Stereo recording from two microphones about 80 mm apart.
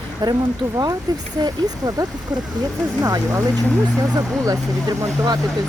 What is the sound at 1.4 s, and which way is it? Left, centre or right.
Speech, right.